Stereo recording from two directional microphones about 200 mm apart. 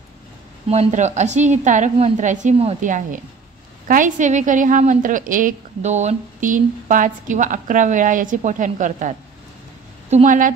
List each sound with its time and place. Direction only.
0.7 s a woman's voice: 35° right (ahead or behind)